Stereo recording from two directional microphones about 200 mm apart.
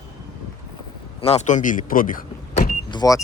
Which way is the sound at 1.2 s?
30° left (ahead or behind).